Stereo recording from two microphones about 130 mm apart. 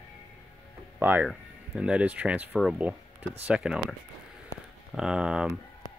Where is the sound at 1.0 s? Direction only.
15° right (ahead or behind).